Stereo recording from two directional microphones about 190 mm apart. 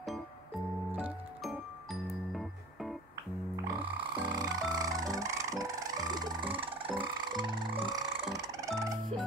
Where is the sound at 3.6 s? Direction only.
20° right (ahead or behind).